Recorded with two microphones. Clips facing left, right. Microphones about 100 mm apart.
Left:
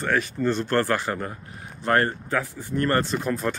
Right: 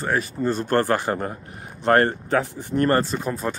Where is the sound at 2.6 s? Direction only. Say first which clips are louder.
Right 2 dB; 25° right (ahead or behind).